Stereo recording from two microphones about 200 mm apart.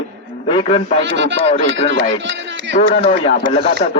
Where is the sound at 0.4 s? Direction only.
25° left (ahead or behind).